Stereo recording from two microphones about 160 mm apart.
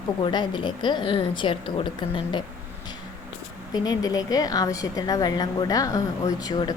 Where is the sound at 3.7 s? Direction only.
25° left (ahead or behind).